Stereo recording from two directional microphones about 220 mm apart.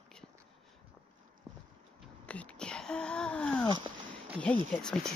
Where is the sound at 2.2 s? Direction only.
5° left (ahead or behind).